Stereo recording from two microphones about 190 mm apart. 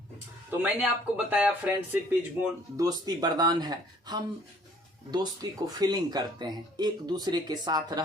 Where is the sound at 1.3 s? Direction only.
5° right (ahead or behind).